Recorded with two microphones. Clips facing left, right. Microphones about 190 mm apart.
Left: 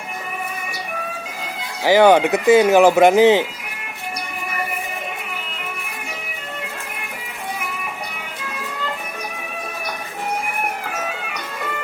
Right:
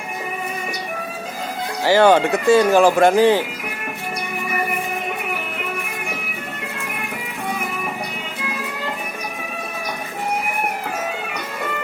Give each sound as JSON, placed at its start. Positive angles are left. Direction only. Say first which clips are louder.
{"t": 1.8, "sound": "speech", "louder": "left 1 dB", "side_deg": 15}